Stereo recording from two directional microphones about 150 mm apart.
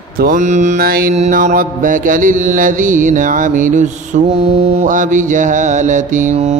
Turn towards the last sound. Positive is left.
turn(degrees=-50)  # may be behind; listen again after turning